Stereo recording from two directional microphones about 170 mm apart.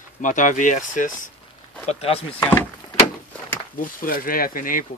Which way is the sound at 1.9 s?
35° left (ahead or behind).